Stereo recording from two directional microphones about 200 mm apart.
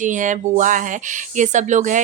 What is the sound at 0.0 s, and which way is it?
Speech, 40° right (ahead or behind).